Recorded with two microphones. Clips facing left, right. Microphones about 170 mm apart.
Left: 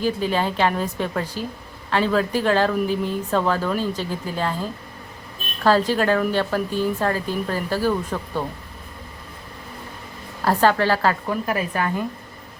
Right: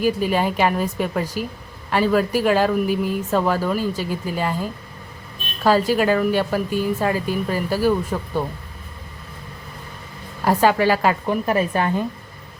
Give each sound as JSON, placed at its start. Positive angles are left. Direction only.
{"t": 0.0, "sound": "speech", "side_deg": -10}
{"t": 10.4, "sound": "a woman's voice", "side_deg": -10}